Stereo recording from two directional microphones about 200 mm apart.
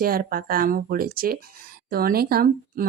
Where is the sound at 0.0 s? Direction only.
45° right (ahead or behind).